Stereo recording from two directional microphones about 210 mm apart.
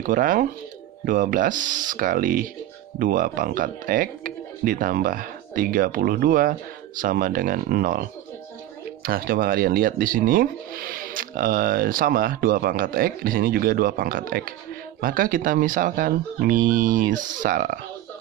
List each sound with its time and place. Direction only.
0.0 s speech: 40° right (ahead or behind)